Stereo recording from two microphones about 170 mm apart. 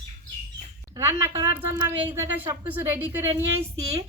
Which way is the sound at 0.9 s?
20° right (ahead or behind).